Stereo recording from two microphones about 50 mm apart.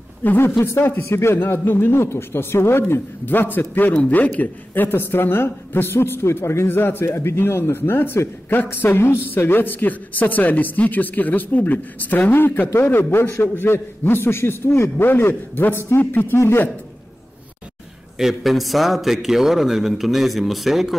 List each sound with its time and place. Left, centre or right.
0.4 s speech: left
1.3 s a man's voice: left
12.6 s a man's voice: left
18.1 s a man's voice: centre